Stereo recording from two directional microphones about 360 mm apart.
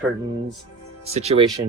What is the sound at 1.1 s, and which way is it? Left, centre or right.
Speech, centre.